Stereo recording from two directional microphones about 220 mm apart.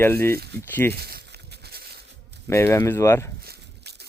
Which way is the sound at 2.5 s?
10° left (ahead or behind).